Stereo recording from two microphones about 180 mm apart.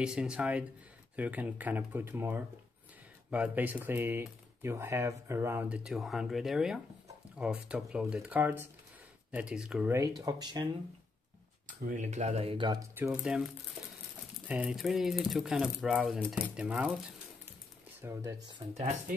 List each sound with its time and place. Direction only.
0.0 s speech: 5° right (ahead or behind)
9.9 s speech: 20° right (ahead or behind)
11.6 s speech: 45° right (ahead or behind); by 12.8 s 25° right (ahead or behind)
12.9 s speech: 10° right (ahead or behind)
14.5 s speech: 5° right (ahead or behind)
18.0 s speech: 20° right (ahead or behind)